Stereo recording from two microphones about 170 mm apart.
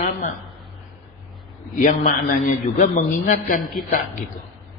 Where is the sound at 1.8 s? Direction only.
50° left (ahead or behind).